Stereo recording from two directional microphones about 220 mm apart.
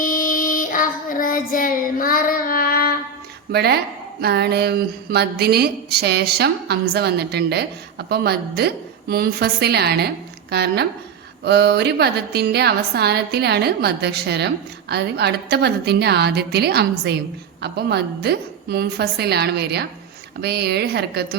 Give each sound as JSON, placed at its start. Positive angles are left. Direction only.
{"t": 0.0, "sound": "child singing", "side_deg": 40}
{"t": 3.5, "sound": "a woman's voice", "side_deg": -45}